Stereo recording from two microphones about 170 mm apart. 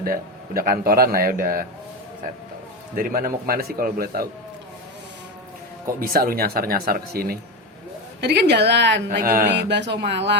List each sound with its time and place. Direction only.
0.0 s a man's voice: 60° right (ahead or behind)
2.9 s a man's voice: 60° right (ahead or behind)
6.0 s a man's voice: 60° right (ahead or behind)
8.2 s speech: 75° right (ahead or behind)
9.0 s speech: 55° right (ahead or behind); by 10.3 s 90° right